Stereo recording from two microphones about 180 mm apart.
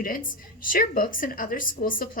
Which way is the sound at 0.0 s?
50° left (ahead or behind).